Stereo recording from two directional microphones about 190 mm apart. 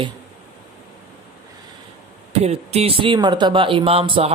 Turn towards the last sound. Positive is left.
turn(degrees=-30)  # may be behind; listen again after turning